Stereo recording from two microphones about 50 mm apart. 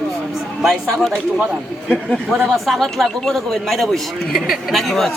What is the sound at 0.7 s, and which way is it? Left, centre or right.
Speech, centre.